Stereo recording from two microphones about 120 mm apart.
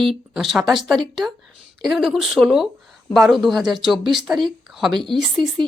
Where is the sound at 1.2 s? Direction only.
20° right (ahead or behind).